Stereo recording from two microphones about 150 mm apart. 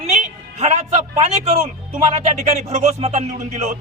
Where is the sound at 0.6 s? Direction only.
50° right (ahead or behind).